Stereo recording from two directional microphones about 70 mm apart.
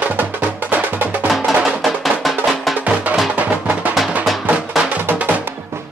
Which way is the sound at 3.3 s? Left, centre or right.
Right.